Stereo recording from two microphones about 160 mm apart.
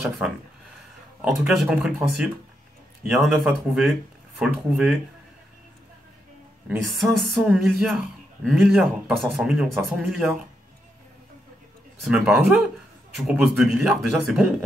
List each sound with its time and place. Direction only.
1.2 s a man's voice: centre (ahead or behind)
6.9 s a man's voice: centre (ahead or behind)
12.3 s a man's voice: 10° right (ahead or behind)